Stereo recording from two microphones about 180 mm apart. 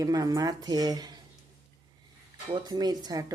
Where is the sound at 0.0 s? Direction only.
20° right (ahead or behind).